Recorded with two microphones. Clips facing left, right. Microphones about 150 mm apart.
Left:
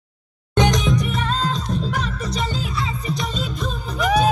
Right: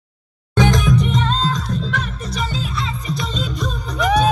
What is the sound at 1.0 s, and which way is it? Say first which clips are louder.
Music: right 4 dB; 10° left (ahead or behind).